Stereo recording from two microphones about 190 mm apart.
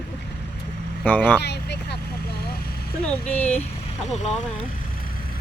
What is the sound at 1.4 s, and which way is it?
Vehicle, 60° left (ahead or behind).